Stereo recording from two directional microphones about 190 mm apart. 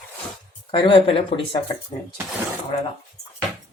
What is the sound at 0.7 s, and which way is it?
Speech, 25° left (ahead or behind).